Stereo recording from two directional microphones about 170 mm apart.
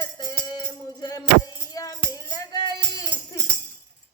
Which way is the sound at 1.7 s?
20° left (ahead or behind).